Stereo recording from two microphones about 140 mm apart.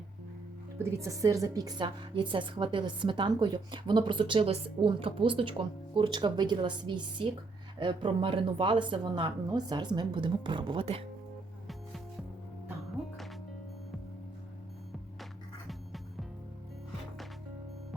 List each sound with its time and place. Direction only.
0.8 s a woman's voice: 20° right (ahead or behind); by 11.0 s 40° right (ahead or behind)
15.2 s music: centre (ahead or behind)